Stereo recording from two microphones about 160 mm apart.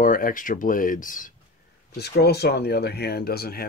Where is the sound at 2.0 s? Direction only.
90° left; by 3.6 s 75° left (ahead or behind).